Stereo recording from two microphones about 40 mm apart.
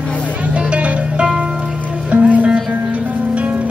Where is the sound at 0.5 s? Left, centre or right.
Right.